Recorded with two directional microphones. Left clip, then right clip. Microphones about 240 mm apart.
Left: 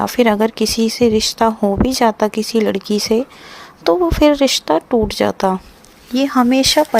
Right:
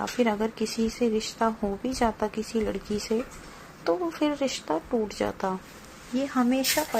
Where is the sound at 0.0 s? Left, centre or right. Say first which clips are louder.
Left 12 dB; left.